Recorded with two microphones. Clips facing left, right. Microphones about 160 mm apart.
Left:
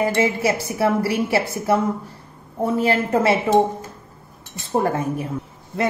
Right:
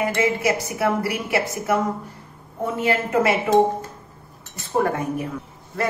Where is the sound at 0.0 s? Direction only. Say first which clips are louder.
Left 2 dB; 30° left (ahead or behind).